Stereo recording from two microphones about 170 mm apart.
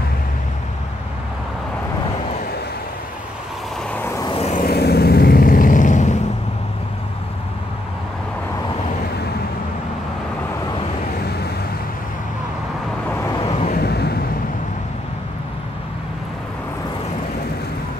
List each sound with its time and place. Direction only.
3.9 s vehicle: 10° left (ahead or behind)
4.4 s vehicle: 45° left (ahead or behind)
4.6 s vehicle: 70° left (ahead or behind); by 6.1 s 45° left (ahead or behind)
11.2 s vehicle: 70° left (ahead or behind)
13.4 s vehicle: 35° left (ahead or behind)
13.7 s vehicle: 70° left (ahead or behind)